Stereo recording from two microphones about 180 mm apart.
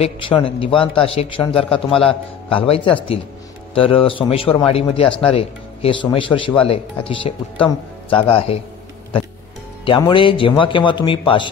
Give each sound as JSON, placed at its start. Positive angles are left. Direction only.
{"t": 0.0, "sound": "a man's voice", "side_deg": 30}
{"t": 9.8, "sound": "a man's voice", "side_deg": 25}